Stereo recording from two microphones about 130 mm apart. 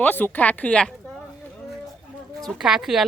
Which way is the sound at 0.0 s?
15° left (ahead or behind).